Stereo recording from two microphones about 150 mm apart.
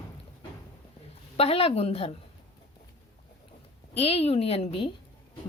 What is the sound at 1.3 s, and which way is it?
Speech, 40° left (ahead or behind).